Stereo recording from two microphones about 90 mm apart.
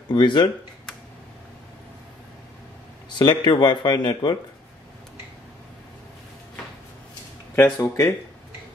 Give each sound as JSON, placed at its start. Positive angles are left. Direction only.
{"t": 0.1, "sound": "speech", "side_deg": 60}
{"t": 3.2, "sound": "speech", "side_deg": 60}
{"t": 7.5, "sound": "speech", "side_deg": 25}
{"t": 7.8, "sound": "speech", "side_deg": 40}